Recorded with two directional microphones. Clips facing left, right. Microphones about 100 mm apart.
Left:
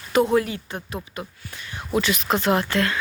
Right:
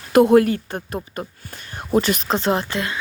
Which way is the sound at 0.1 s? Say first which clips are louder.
Right 6 dB; 55° right (ahead or behind).